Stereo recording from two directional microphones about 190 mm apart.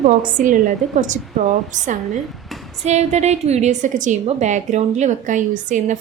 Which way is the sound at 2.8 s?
35° right (ahead or behind).